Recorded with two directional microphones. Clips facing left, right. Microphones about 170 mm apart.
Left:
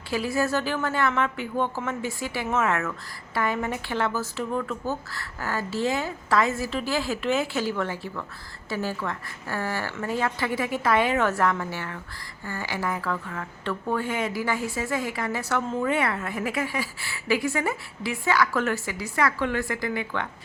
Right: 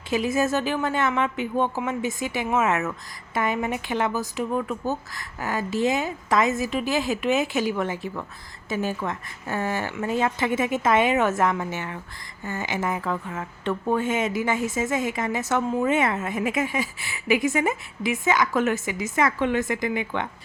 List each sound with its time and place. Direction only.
0.1 s a woman's voice: 20° right (ahead or behind)